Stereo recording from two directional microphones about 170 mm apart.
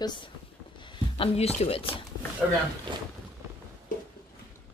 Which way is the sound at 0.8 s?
30° left (ahead or behind).